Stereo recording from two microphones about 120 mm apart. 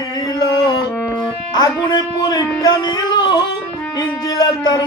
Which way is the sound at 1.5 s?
40° left (ahead or behind).